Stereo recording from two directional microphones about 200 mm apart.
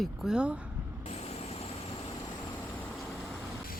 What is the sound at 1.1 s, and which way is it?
Vehicle, 30° left (ahead or behind).